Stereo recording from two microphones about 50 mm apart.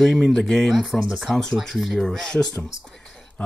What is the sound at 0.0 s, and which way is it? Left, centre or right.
Speech, centre.